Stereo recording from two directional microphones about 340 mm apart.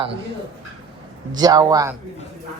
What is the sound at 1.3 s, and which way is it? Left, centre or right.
Speech, centre.